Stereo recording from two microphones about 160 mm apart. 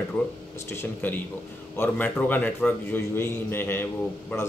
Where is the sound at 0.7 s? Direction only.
15° left (ahead or behind).